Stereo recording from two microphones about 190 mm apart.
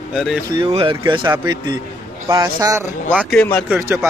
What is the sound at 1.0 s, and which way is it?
A man's voice, 15° right (ahead or behind).